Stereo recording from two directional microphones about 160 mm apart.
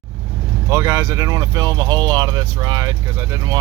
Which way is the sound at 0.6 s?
15° right (ahead or behind).